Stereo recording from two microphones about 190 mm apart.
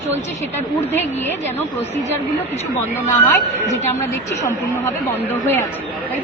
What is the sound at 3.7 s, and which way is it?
A woman's voice, 15° left (ahead or behind).